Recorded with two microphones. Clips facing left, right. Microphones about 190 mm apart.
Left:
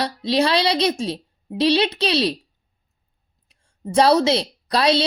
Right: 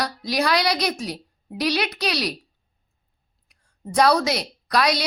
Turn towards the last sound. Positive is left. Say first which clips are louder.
# left 3 dB
turn(degrees=30)  # may be behind; listen again after turning